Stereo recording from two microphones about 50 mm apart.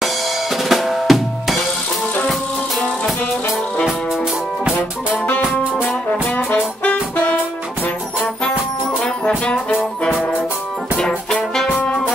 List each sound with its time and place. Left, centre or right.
0.7 s drum: centre
6.3 s brass instrument: left